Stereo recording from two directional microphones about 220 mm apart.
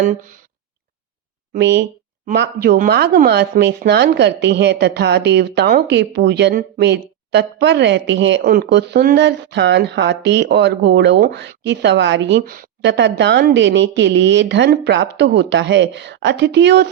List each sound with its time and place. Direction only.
0.0 s speech: 35° right (ahead or behind)
1.5 s speech: 50° right (ahead or behind)